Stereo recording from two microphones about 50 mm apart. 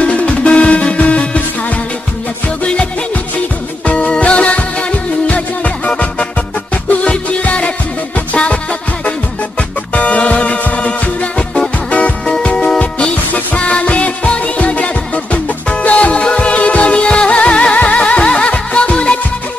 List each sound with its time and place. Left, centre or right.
0.0 s music: left
3.8 s music: left
5.9 s music: left
9.9 s music: left
12.4 s music: left